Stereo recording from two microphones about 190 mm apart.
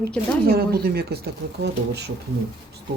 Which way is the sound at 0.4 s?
55° right (ahead or behind).